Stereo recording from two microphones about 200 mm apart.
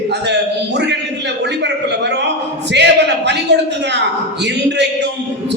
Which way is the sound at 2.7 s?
60° right (ahead or behind).